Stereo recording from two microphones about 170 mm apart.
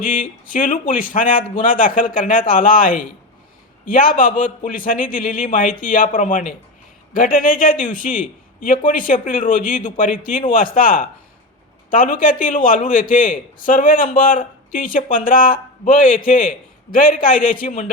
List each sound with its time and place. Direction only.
0.0 s a man's voice: 50° left (ahead or behind)